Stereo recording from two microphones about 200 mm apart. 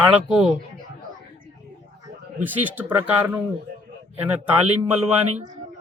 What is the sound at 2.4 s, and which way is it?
A man's voice, 10° right (ahead or behind).